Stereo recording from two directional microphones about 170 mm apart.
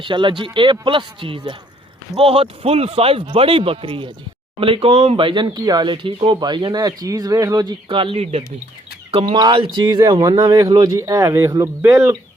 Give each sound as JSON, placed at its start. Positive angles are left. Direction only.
{"t": 0.0, "sound": "speech", "side_deg": -30}
{"t": 9.3, "sound": "speech", "side_deg": -25}